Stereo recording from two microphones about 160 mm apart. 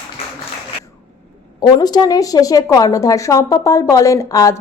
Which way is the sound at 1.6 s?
25° left (ahead or behind).